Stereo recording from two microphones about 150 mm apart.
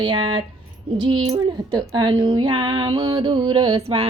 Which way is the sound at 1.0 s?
35° right (ahead or behind).